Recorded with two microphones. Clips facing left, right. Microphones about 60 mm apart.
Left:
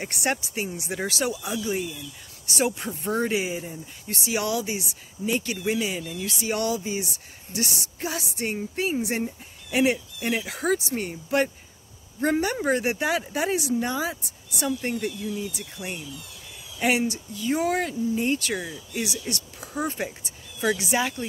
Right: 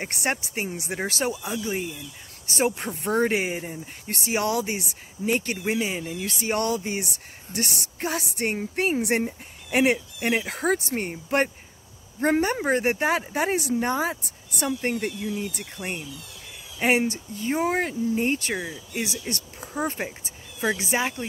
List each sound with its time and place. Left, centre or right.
0.0 s speech: right
5.7 s speech: right
18.6 s speech: centre
19.0 s speech: right